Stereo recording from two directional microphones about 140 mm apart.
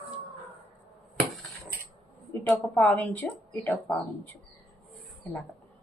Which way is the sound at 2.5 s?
10° left (ahead or behind).